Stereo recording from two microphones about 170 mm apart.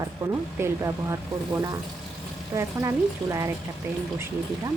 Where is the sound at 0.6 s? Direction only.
15° right (ahead or behind).